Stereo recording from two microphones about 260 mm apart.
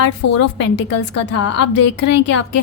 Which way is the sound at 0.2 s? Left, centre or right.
Left.